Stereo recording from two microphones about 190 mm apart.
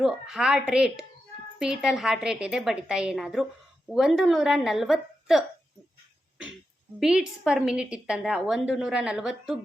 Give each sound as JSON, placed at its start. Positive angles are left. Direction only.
{"t": 0.0, "sound": "a woman's voice", "side_deg": 0}
{"t": 7.0, "sound": "a woman's voice", "side_deg": -5}